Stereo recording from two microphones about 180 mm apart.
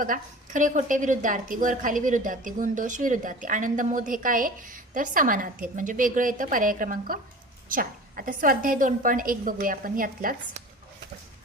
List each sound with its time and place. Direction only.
0.0 s a woman's voice: 50° right (ahead or behind)